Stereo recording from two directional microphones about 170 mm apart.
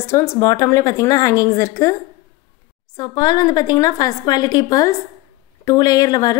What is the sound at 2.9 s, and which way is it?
A woman's voice, 25° left (ahead or behind).